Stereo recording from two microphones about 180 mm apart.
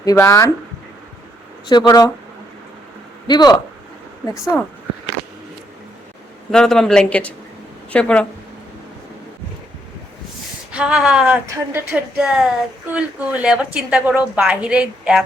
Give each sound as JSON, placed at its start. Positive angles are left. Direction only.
{"t": 0.0, "sound": "speech", "side_deg": 15}
{"t": 1.6, "sound": "speech", "side_deg": 25}
{"t": 3.2, "sound": "speech", "side_deg": 25}
{"t": 6.5, "sound": "speech", "side_deg": 5}
{"t": 10.7, "sound": "a woman's voice", "side_deg": -5}